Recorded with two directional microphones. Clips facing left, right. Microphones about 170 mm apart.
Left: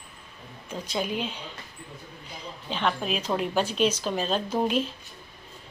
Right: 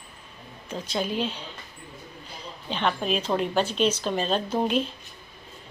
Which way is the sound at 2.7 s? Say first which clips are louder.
Right 2 dB; 5° left (ahead or behind).